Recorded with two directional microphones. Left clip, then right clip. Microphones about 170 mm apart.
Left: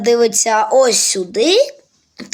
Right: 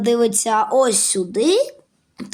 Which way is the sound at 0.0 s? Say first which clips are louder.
Left 4 dB; 50° right (ahead or behind).